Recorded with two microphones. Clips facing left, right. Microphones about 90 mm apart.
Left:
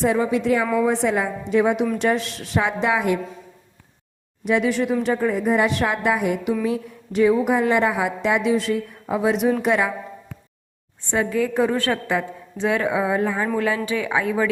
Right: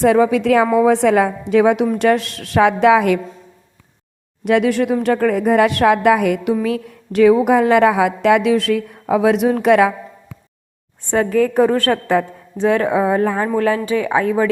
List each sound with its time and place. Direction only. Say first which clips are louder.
0.0 s a woman's voice: right 7 dB; 85° right
2.0 s a woman's voice: right 6 dB; 55° right (ahead or behind); by 3.2 s 90° right
4.4 s a woman's voice: right 5 dB; 70° right (ahead or behind)
7.4 s a woman's voice: right 7 dB; 85° right; by 9.9 s 70° right (ahead or behind)
11.1 s a woman's voice: right 6 dB; 50° right (ahead or behind)